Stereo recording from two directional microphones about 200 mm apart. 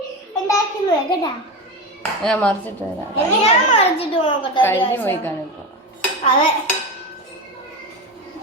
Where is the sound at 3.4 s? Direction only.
30° left (ahead or behind).